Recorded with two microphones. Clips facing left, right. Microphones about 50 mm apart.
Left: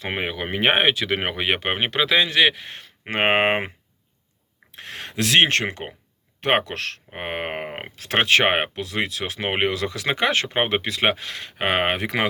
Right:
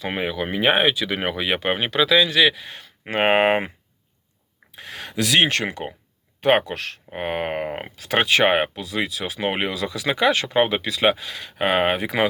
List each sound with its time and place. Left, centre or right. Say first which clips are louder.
0.0 s speech: right 2 dB; left
4.8 s speech: right 1 dB; left
6.7 s speech: even; left
7.1 s speech: right 5 dB; left
7.9 s speech: even; left